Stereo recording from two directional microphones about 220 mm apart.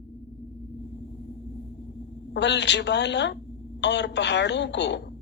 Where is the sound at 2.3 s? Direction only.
50° left (ahead or behind).